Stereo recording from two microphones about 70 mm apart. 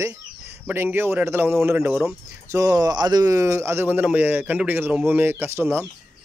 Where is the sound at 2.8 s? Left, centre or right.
Right.